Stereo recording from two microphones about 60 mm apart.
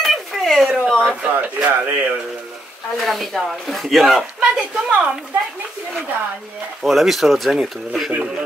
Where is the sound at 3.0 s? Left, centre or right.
Centre.